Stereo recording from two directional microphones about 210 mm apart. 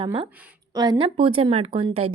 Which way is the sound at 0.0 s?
25° right (ahead or behind).